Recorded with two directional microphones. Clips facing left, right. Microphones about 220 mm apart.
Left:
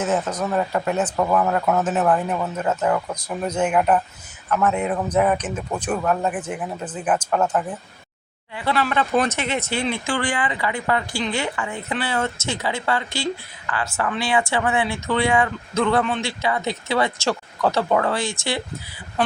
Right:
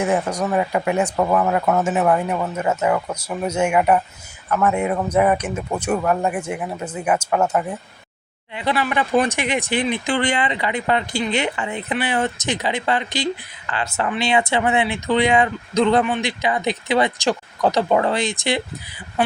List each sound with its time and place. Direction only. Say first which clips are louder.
0.0 s a man's voice: right 2 dB; 10° right (ahead or behind)